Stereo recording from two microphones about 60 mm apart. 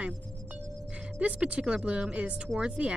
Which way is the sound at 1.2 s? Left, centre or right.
Centre.